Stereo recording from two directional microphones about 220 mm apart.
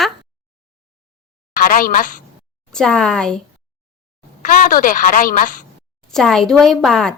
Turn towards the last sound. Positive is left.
turn(degrees=0)  # may be behind; listen again after turning